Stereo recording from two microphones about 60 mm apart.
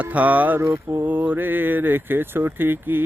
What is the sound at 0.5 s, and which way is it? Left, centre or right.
Mantra, right.